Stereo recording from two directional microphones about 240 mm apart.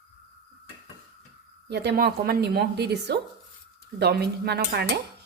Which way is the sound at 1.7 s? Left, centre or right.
Right.